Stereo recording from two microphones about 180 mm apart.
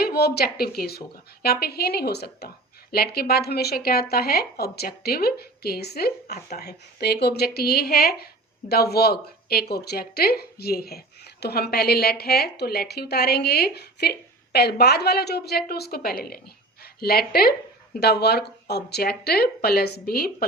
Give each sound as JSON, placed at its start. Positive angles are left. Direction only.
{"t": 0.0, "sound": "a woman's voice", "side_deg": 60}